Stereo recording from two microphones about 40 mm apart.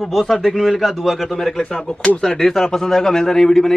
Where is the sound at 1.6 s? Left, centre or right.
Left.